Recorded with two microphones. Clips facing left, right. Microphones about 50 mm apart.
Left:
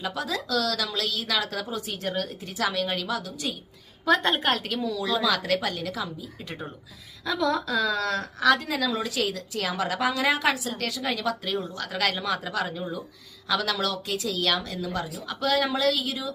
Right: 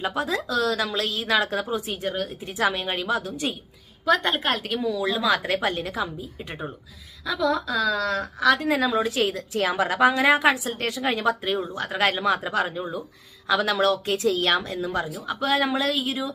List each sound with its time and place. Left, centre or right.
0.0 s a woman's voice: right; by 2.3 s centre
2.6 s a woman's voice: right
4.0 s a woman's voice: centre
4.8 s a woman's voice: centre
7.3 s a woman's voice: centre
8.5 s a woman's voice: right